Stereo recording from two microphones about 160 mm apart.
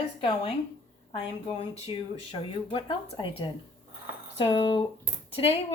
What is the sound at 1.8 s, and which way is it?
Speech, 35° left (ahead or behind).